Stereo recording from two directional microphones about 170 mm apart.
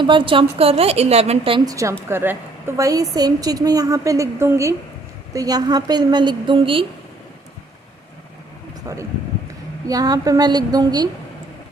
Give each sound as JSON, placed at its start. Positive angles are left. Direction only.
{"t": 0.0, "sound": "a woman's voice", "side_deg": -30}
{"t": 8.9, "sound": "a sound", "side_deg": -20}
{"t": 9.8, "sound": "a woman's voice", "side_deg": -20}